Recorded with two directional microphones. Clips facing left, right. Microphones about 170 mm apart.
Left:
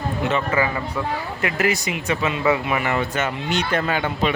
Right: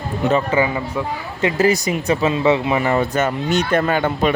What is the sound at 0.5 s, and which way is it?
Speech, 20° right (ahead or behind).